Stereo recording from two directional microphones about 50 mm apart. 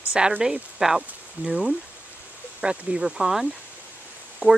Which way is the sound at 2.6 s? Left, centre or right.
Centre.